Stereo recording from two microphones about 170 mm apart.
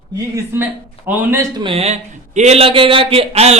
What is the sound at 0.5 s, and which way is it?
Speech, 10° right (ahead or behind).